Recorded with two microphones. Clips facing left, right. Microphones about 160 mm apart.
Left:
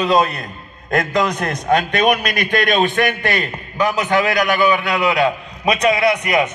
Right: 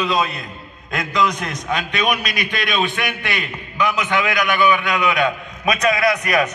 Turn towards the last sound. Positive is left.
turn(degrees=25)  # may be behind; listen again after turning